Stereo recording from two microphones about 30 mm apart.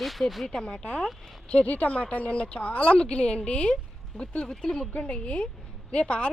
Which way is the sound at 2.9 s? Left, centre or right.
Left.